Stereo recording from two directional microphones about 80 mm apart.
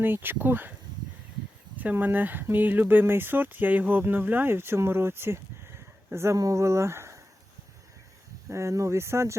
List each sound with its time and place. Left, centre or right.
0.0 s speech: right
1.7 s speech: right
6.1 s speech: right
8.4 s speech: right